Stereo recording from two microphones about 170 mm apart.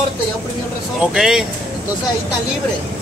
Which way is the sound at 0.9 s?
5° right (ahead or behind).